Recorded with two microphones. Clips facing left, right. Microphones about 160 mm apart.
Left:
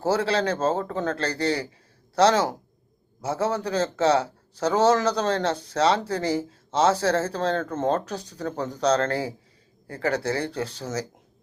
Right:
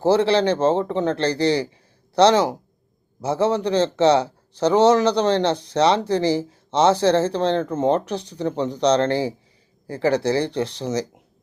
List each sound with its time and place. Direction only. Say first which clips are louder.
0.0 s a man's voice: right 6 dB; 25° right (ahead or behind)